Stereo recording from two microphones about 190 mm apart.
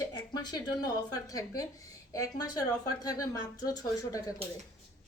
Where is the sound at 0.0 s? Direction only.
20° left (ahead or behind).